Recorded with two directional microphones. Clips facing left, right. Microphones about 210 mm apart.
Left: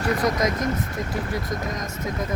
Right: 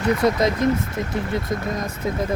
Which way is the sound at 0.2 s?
30° right (ahead or behind).